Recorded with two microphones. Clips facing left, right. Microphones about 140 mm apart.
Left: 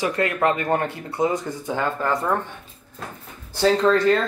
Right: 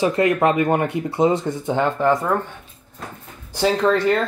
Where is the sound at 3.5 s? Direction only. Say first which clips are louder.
Even; 15° right (ahead or behind).